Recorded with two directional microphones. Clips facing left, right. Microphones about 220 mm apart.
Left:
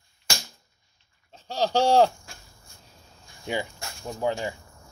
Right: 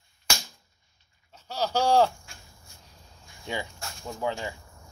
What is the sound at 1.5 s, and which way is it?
Speech, 25° left (ahead or behind).